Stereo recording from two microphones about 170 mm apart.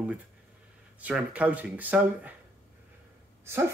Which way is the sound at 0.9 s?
10° right (ahead or behind).